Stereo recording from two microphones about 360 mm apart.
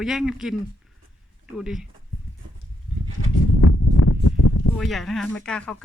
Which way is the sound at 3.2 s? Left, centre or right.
Left.